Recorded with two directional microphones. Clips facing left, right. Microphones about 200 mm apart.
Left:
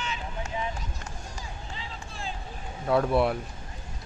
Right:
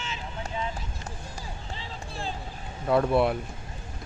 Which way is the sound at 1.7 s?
35° right (ahead or behind).